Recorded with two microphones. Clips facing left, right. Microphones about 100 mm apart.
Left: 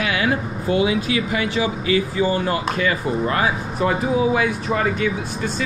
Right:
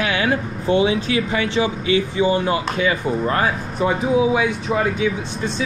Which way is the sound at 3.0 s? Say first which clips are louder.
Right 1 dB; centre (ahead or behind).